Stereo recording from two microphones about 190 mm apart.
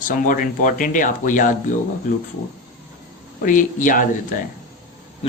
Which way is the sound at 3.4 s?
45° left (ahead or behind).